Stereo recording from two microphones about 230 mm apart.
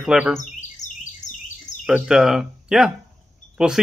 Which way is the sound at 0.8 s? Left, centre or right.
Centre.